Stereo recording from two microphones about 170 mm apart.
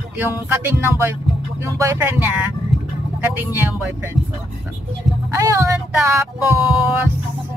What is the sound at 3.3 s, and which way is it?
Music, 10° right (ahead or behind).